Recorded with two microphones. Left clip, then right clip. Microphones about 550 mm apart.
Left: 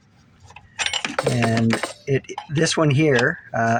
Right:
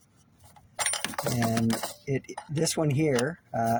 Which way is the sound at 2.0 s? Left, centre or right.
Right.